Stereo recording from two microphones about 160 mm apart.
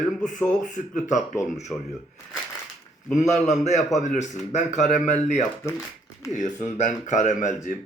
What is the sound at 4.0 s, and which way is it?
A man's voice, 45° left (ahead or behind).